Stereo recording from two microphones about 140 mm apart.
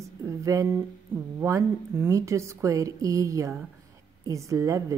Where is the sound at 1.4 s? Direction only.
20° right (ahead or behind).